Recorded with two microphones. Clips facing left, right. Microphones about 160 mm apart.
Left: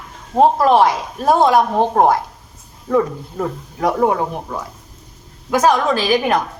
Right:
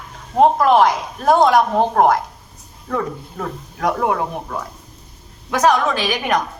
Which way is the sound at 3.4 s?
20° left (ahead or behind).